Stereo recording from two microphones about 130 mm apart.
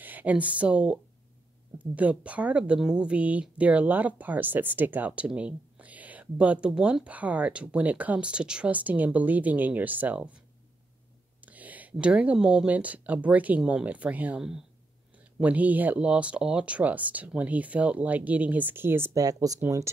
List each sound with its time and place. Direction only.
0.0 s speech: 10° right (ahead or behind)
11.4 s speech: 10° right (ahead or behind)
19.2 s speech: 25° right (ahead or behind)